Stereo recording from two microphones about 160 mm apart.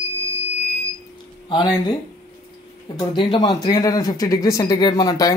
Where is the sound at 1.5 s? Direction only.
30° left (ahead or behind).